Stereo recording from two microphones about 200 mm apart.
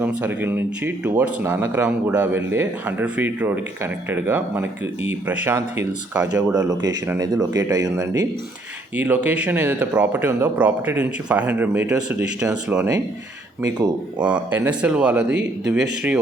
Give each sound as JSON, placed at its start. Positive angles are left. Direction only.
{"t": 0.0, "sound": "speech", "side_deg": -10}
{"t": 13.6, "sound": "speech", "side_deg": -15}
{"t": 14.2, "sound": "speech", "side_deg": -5}